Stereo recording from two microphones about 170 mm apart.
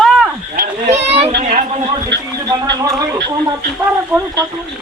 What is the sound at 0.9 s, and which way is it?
A man's voice, 40° right (ahead or behind).